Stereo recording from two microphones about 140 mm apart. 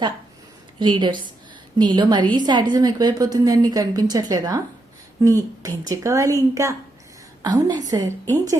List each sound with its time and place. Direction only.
0.8 s a woman's voice: 35° right (ahead or behind)